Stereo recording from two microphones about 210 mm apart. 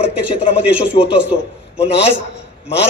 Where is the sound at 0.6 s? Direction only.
5° right (ahead or behind).